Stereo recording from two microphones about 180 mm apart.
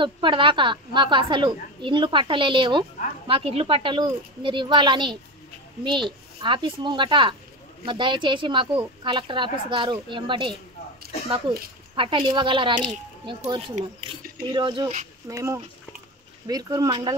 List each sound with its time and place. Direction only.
0.0 s a woman's voice: 25° right (ahead or behind)